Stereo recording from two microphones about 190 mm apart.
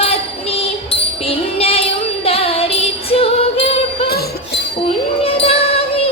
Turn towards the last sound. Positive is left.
turn(degrees=30)  # may be behind; listen again after turning